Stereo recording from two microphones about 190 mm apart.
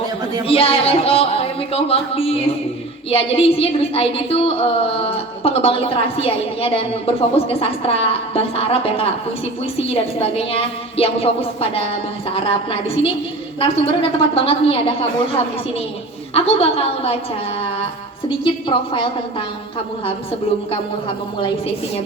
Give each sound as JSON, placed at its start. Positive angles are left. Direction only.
{"t": 0.4, "sound": "a woman's voice", "side_deg": 30}
{"t": 13.6, "sound": "a woman's voice", "side_deg": 30}
{"t": 16.3, "sound": "speech", "side_deg": 30}
{"t": 18.3, "sound": "a woman's voice", "side_deg": 25}